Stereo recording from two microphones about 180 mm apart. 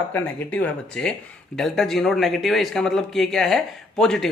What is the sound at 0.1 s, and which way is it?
Speech, 10° left (ahead or behind).